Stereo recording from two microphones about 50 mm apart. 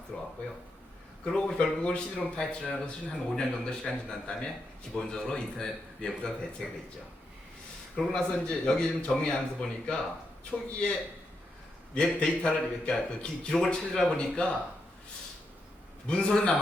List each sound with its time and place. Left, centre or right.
0.1 s a man's voice: centre
6.6 s speech: centre
7.9 s a man's voice: centre
11.9 s a man's voice: centre
16.0 s speech: centre